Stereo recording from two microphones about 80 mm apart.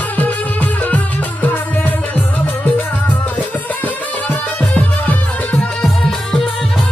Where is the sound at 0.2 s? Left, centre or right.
Left.